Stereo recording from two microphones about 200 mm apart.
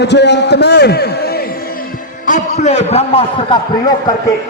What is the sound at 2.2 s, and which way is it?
A man's voice, 35° left (ahead or behind).